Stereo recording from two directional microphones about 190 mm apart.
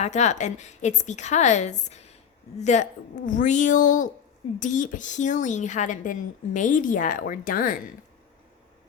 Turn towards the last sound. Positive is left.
turn(degrees=45)  # may be behind; listen again after turning